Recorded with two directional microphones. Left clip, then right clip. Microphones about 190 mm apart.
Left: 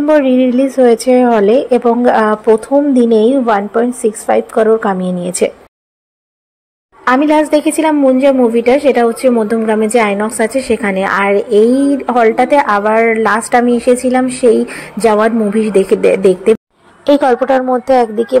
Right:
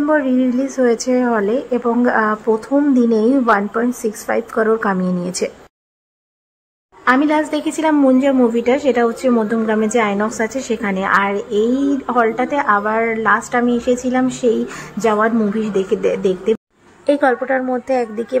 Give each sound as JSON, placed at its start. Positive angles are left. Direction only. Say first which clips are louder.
{"t": 0.0, "sound": "a woman's voice", "louder": "left 6 dB", "side_deg": 15}
{"t": 7.1, "sound": "a woman's voice", "louder": "left 5 dB", "side_deg": 15}
{"t": 17.3, "sound": "a woman's voice", "louder": "left 6 dB", "side_deg": 10}